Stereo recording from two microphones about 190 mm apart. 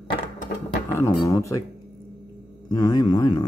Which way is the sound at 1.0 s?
15° left (ahead or behind).